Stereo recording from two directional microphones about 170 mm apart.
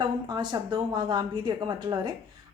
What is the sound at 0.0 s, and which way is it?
A woman's voice, 25° right (ahead or behind).